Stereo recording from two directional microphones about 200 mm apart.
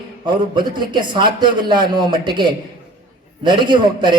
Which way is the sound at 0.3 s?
20° right (ahead or behind).